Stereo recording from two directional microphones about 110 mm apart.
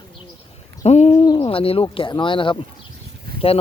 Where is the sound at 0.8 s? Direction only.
85° left.